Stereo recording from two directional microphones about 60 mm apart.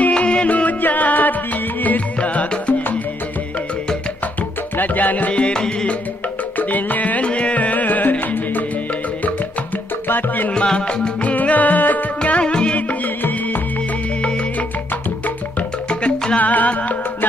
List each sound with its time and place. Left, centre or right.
0.0 s music: centre
4.7 s music: left; by 5.9 s centre
6.7 s music: left
10.0 s music: left
10.5 s music: centre
15.9 s music: centre